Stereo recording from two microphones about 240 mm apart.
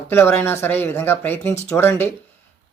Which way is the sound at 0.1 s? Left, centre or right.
Centre.